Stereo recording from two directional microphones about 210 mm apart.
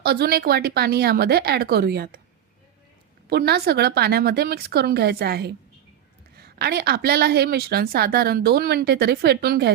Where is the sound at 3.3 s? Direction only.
50° right (ahead or behind).